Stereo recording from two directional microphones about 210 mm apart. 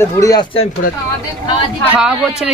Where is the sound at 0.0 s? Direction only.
15° left (ahead or behind).